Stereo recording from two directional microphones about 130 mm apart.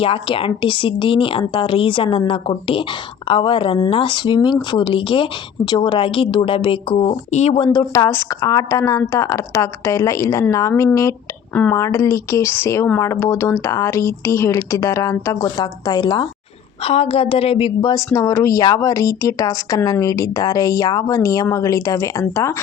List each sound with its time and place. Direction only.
0.0 s speech: 45° left (ahead or behind)
7.3 s speech: 60° left (ahead or behind)
7.6 s speech: 30° left (ahead or behind)
16.8 s a woman's voice: 50° left (ahead or behind)
17.9 s speech: 25° left (ahead or behind)